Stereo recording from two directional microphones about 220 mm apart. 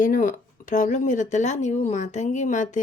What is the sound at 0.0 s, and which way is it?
Speech, 35° left (ahead or behind).